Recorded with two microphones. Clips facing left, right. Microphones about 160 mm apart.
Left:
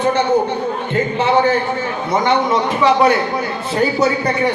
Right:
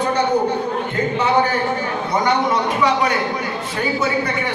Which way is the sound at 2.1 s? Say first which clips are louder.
Left 3 dB; 25° left (ahead or behind).